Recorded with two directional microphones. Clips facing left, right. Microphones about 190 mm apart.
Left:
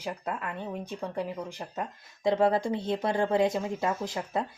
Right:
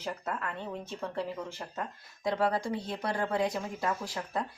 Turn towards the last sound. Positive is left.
turn(degrees=20)  # may be behind; listen again after turning